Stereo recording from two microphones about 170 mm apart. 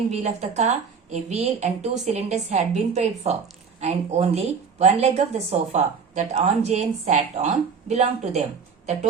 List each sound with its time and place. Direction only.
0.1 s a woman's voice: 40° right (ahead or behind)